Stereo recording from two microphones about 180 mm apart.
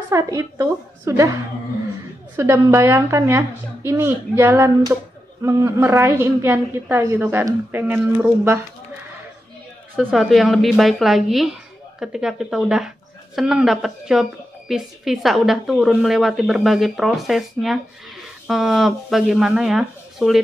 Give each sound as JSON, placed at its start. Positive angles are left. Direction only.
{"t": 0.1, "sound": "a woman's voice", "side_deg": -20}
{"t": 9.9, "sound": "a woman's voice", "side_deg": 0}